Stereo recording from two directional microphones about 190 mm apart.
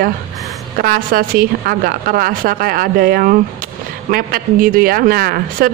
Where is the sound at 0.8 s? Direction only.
50° right (ahead or behind).